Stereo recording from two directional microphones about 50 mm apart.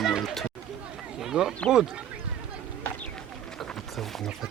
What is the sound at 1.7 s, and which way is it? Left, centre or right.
Speech, centre.